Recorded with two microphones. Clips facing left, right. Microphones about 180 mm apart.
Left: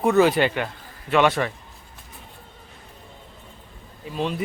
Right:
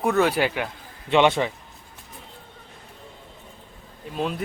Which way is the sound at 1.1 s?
25° right (ahead or behind).